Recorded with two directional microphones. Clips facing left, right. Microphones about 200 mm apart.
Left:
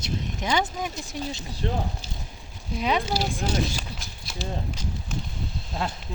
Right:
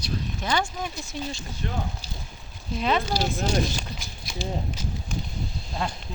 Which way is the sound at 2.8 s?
10° left (ahead or behind).